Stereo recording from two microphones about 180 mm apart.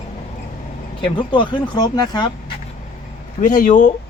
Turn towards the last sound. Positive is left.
turn(degrees=45)  # may be behind; listen again after turning